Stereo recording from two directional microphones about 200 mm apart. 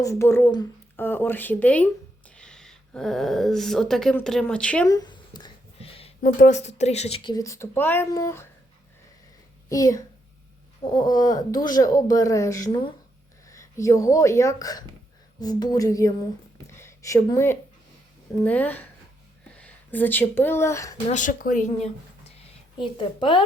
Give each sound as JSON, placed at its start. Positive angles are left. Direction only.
{"t": 0.0, "sound": "speech", "side_deg": 15}
{"t": 4.9, "sound": "a sound", "side_deg": 20}
{"t": 6.2, "sound": "speech", "side_deg": 40}
{"t": 7.3, "sound": "speech", "side_deg": 15}
{"t": 9.6, "sound": "speech", "side_deg": 15}
{"t": 21.1, "sound": "a woman's voice", "side_deg": 40}